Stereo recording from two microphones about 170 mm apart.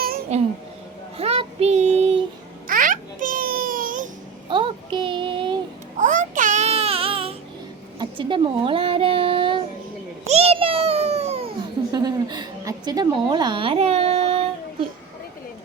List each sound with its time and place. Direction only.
0.3 s a child's voice: 40° right (ahead or behind)
1.2 s child singing: 35° right (ahead or behind)
2.6 s babbling: 50° right (ahead or behind)
4.4 s child singing: 30° right (ahead or behind)
6.0 s babbling: 50° right (ahead or behind); by 7.3 s 35° right (ahead or behind)
7.9 s a sound: 30° right (ahead or behind)